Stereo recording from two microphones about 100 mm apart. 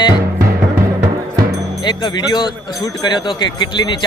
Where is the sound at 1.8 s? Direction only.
45° left (ahead or behind).